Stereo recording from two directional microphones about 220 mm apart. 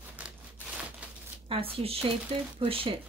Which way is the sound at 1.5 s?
25° right (ahead or behind).